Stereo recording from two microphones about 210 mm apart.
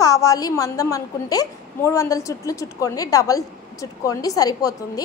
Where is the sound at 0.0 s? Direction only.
15° left (ahead or behind).